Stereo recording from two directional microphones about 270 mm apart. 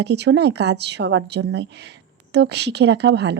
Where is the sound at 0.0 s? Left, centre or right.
Right.